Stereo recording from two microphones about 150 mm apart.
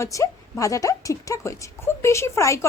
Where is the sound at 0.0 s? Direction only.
20° left (ahead or behind).